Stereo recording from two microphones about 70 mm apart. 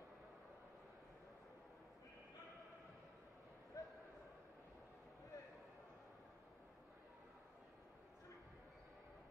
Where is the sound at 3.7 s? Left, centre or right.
Left.